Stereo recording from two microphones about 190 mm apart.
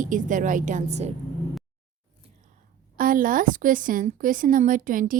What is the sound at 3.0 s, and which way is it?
A woman's voice, 45° right (ahead or behind).